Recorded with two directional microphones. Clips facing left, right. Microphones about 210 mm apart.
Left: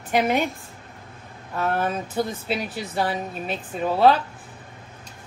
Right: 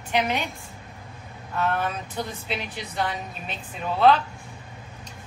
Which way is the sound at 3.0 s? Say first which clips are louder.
Left 3 dB; 40° left (ahead or behind).